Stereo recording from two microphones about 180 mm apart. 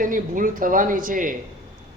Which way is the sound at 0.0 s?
50° right (ahead or behind).